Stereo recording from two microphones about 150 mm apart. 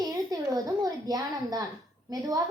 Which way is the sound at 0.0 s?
25° right (ahead or behind).